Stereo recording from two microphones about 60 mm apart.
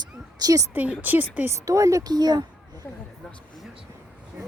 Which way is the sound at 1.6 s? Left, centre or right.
Right.